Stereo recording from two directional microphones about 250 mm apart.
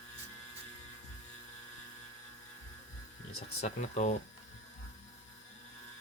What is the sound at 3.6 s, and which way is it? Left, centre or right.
Speech, left.